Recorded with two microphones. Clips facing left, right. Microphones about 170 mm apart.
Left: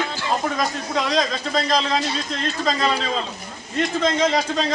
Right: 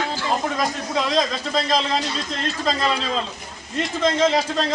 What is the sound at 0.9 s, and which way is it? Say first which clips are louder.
Speech: even; centre (ahead or behind).